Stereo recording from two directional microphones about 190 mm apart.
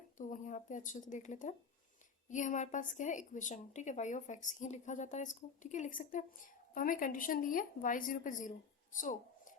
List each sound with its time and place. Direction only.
0.2 s a woman's voice: 40° left (ahead or behind)